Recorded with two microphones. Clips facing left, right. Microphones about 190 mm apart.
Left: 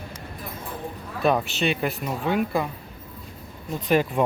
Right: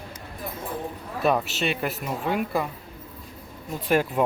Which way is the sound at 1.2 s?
Centre (ahead or behind).